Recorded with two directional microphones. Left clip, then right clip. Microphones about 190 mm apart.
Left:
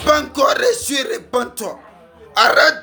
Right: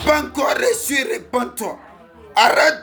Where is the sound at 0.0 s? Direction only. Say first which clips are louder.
Left 3 dB; 15° left (ahead or behind).